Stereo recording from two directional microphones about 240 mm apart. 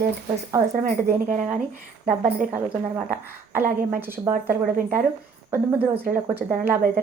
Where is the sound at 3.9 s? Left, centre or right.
Centre.